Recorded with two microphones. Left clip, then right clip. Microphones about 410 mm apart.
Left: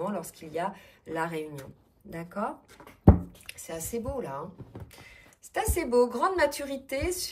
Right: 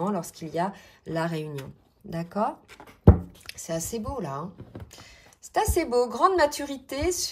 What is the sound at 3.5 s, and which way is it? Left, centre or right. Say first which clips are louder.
Speech: right 5 dB; centre.